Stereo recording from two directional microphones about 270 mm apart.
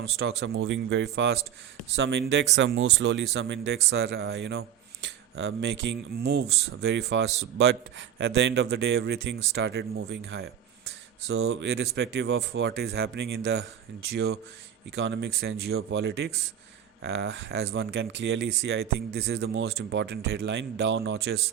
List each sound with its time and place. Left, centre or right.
0.0 s speech: right